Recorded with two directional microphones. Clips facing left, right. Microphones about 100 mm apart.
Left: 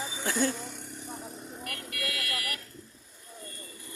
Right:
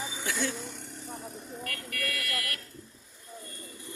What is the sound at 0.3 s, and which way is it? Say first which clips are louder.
Speech: left 4 dB; 40° left (ahead or behind).